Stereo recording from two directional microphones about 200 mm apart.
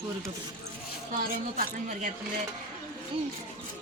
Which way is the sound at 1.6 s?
40° right (ahead or behind).